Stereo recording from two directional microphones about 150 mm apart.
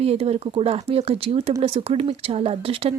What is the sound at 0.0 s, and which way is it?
Speech, 40° right (ahead or behind).